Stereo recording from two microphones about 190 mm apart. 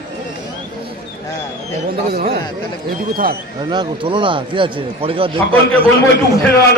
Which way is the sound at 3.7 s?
25° right (ahead or behind).